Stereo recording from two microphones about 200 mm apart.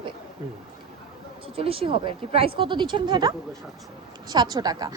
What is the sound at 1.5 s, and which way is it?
Speech, 30° right (ahead or behind).